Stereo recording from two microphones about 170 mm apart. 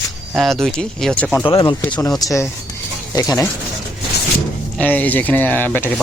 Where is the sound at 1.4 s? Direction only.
30° left (ahead or behind).